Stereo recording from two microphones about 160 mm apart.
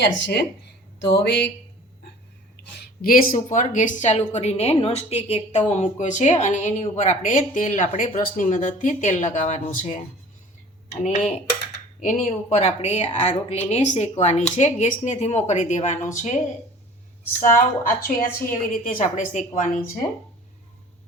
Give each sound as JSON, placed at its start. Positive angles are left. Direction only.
{"t": 0.0, "sound": "speech", "side_deg": 90}
{"t": 3.0, "sound": "a woman's voice", "side_deg": 65}
{"t": 17.4, "sound": "a woman's voice", "side_deg": 60}